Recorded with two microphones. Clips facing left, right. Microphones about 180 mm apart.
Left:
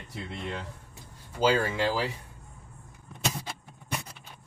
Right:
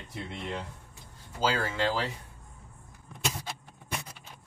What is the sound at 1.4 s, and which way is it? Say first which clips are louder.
Speech: left 4 dB; 15° left (ahead or behind).